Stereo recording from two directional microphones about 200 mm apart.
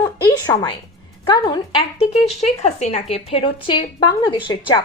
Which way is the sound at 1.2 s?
25° left (ahead or behind).